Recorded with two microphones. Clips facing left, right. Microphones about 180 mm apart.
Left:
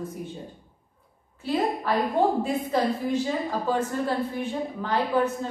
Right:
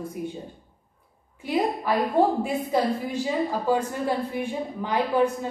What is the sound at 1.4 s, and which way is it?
A woman's voice, 10° right (ahead or behind).